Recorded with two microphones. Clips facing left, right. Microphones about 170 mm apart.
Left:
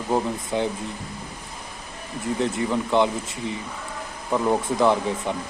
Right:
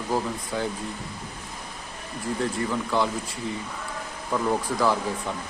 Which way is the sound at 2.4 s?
20° left (ahead or behind).